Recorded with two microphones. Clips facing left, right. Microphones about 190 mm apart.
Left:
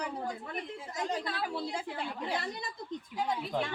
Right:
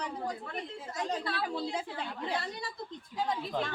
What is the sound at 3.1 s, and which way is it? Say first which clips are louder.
Speech: even; 5° left (ahead or behind).